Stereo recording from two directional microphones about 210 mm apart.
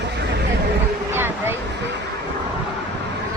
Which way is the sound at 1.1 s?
10° right (ahead or behind).